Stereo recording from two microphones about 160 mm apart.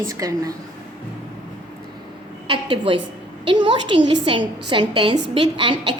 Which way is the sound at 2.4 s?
30° right (ahead or behind).